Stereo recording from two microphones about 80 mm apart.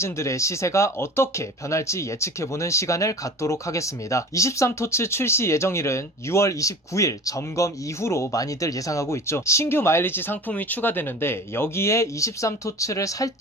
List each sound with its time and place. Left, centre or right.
0.0 s speech: left